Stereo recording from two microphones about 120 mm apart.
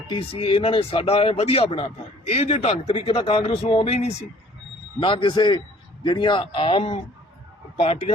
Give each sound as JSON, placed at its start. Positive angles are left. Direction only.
{"t": 0.1, "sound": "speech", "side_deg": 45}
{"t": 4.9, "sound": "speech", "side_deg": 45}